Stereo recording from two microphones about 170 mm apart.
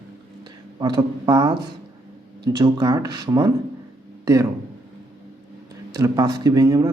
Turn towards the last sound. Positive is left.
turn(degrees=-20)  # may be behind; listen again after turning